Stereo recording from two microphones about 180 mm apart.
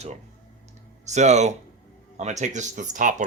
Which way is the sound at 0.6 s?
40° right (ahead or behind).